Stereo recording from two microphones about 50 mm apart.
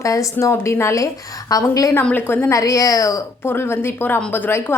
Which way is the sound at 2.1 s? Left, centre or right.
Left.